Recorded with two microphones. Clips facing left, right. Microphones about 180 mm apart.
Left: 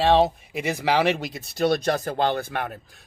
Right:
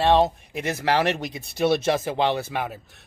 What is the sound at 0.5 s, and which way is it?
Speech, 10° left (ahead or behind).